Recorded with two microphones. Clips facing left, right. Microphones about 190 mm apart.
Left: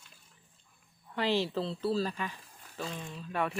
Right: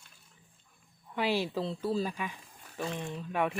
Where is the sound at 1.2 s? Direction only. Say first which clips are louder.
Even; 10° right (ahead or behind).